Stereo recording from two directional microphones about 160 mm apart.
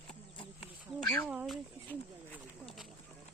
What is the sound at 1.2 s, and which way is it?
Speech, 5° right (ahead or behind).